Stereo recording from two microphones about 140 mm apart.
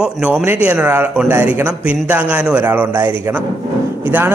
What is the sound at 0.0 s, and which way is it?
Speech, 10° right (ahead or behind).